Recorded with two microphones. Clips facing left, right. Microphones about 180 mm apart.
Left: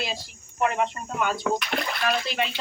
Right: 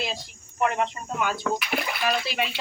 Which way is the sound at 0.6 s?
Centre (ahead or behind).